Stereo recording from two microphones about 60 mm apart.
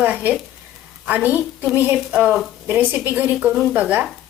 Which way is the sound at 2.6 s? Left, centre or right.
Right.